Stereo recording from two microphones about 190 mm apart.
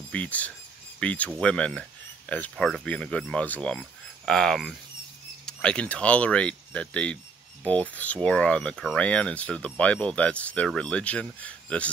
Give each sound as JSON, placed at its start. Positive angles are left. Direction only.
{"t": 0.1, "sound": "speech", "side_deg": 5}